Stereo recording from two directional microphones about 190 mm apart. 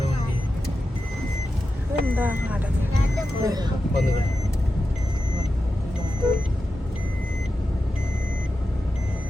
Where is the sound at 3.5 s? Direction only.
20° right (ahead or behind).